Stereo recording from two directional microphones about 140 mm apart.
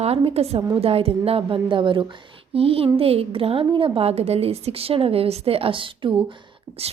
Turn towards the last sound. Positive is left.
turn(degrees=-40)  # may be behind; listen again after turning